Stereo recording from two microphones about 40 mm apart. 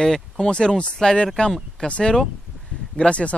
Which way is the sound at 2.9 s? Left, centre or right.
Left.